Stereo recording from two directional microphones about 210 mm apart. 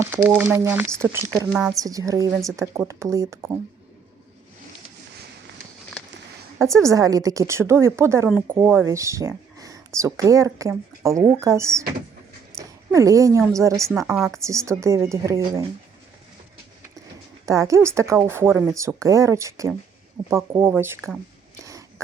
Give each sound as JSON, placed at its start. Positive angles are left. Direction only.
{"t": 0.0, "sound": "speech", "side_deg": -10}
{"t": 6.6, "sound": "speech", "side_deg": -15}
{"t": 12.5, "sound": "a sound", "side_deg": -15}
{"t": 13.6, "sound": "speech", "side_deg": -15}
{"t": 14.2, "sound": "speech", "side_deg": 0}
{"t": 14.4, "sound": "speech", "side_deg": -15}
{"t": 17.4, "sound": "speech", "side_deg": -15}
{"t": 21.6, "sound": "a sound", "side_deg": -15}